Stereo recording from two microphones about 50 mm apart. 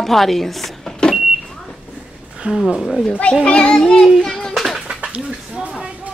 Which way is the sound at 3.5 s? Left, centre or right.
Centre.